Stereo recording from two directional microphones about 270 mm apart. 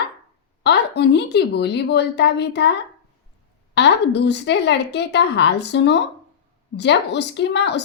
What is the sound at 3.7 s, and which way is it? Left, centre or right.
A woman's voice, left.